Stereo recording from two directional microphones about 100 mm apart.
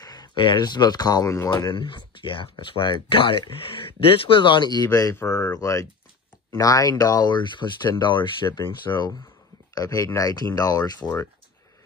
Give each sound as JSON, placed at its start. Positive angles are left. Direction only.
{"t": 0.0, "sound": "a sound", "side_deg": 40}
{"t": 0.4, "sound": "speech", "side_deg": 50}
{"t": 1.5, "sound": "speech", "side_deg": 50}
{"t": 5.1, "sound": "speech", "side_deg": 35}